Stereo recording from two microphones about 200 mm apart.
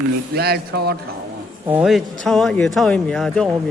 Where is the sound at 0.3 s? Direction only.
55° right (ahead or behind).